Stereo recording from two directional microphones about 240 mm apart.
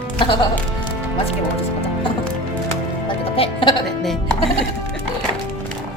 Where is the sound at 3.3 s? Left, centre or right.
Left.